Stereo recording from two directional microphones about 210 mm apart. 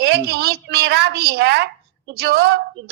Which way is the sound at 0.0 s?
50° right (ahead or behind).